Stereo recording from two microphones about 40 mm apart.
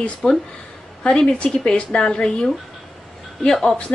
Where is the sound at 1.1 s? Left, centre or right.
Left.